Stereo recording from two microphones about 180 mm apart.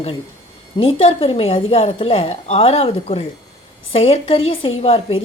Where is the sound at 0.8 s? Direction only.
30° left (ahead or behind).